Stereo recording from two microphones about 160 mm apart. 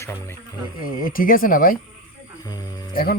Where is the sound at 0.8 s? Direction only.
60° left (ahead or behind).